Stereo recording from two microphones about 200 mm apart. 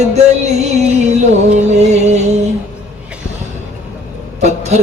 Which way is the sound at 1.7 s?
35° right (ahead or behind).